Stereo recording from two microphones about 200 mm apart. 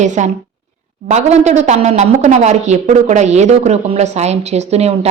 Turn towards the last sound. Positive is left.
turn(degrees=-30)  # may be behind; listen again after turning